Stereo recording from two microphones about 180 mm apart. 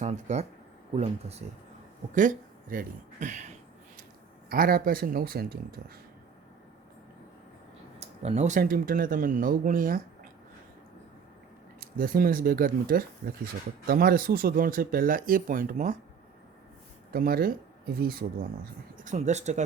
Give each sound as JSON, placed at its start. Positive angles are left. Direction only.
{"t": 0.0, "sound": "speech", "side_deg": -40}
{"t": 2.1, "sound": "speech", "side_deg": -45}
{"t": 4.4, "sound": "speech", "side_deg": -55}
{"t": 7.9, "sound": "speech", "side_deg": -35}
{"t": 11.8, "sound": "speech", "side_deg": -55}
{"t": 17.1, "sound": "speech", "side_deg": -55}
{"t": 19.1, "sound": "speech", "side_deg": -40}